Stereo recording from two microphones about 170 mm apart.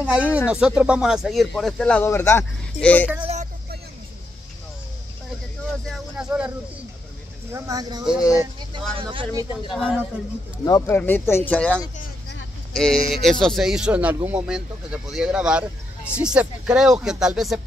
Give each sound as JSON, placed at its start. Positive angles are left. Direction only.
{"t": 0.0, "sound": "speech", "side_deg": -5}
{"t": 5.9, "sound": "a sound", "side_deg": -5}
{"t": 7.5, "sound": "speech", "side_deg": -20}
{"t": 9.5, "sound": "speech", "side_deg": 25}
{"t": 9.8, "sound": "speech", "side_deg": 0}
{"t": 10.6, "sound": "speech", "side_deg": 20}
{"t": 11.0, "sound": "speech", "side_deg": 10}